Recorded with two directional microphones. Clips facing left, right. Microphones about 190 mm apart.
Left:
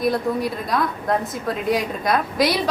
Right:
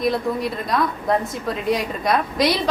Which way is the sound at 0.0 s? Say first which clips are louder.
Even; centre (ahead or behind).